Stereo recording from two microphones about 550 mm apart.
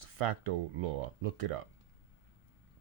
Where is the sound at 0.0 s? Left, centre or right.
Right.